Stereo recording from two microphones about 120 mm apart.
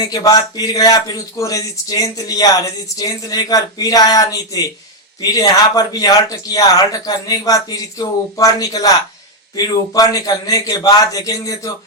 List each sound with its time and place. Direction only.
0.1 s a man's voice: 30° left (ahead or behind)